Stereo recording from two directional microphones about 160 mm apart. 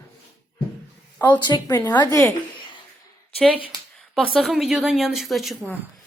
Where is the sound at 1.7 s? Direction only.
15° left (ahead or behind).